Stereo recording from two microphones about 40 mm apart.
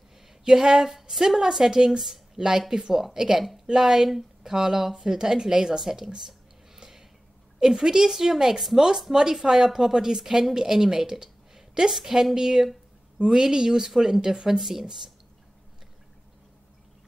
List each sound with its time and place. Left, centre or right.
0.5 s a woman's voice: centre
6.8 s a sound: centre
7.6 s a woman's voice: centre